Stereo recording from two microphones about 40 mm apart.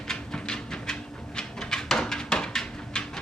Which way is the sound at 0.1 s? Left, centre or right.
Centre.